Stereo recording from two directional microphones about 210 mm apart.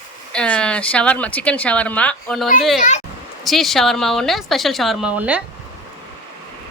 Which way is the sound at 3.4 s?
Centre (ahead or behind).